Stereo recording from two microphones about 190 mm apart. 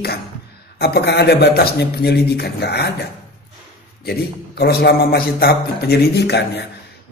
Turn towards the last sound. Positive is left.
turn(degrees=60)  # may be behind; listen again after turning